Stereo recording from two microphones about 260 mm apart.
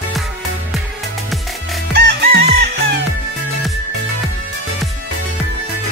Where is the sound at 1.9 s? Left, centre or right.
Right.